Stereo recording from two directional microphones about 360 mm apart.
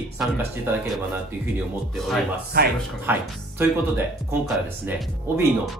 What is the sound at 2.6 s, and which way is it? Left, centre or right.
Speech, right.